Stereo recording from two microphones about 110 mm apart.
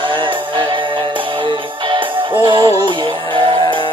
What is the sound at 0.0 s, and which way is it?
Music, 50° right (ahead or behind).